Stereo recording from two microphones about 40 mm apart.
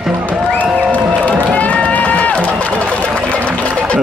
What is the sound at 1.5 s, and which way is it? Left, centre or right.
Run, left.